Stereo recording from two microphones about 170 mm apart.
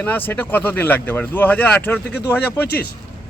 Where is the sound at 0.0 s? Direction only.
10° left (ahead or behind).